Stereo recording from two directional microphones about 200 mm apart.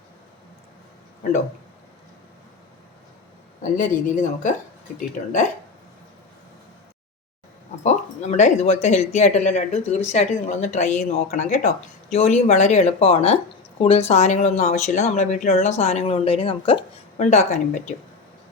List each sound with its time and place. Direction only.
3.6 s speech: 40° left (ahead or behind)
7.9 s speech: 35° left (ahead or behind)